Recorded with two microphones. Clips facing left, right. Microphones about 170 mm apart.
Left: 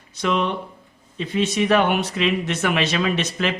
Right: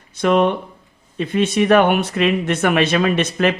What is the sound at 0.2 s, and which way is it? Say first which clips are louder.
Speech: right 7 dB; 55° right (ahead or behind).